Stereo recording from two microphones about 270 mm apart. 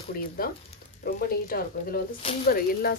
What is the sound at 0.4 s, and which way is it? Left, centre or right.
Speech, left.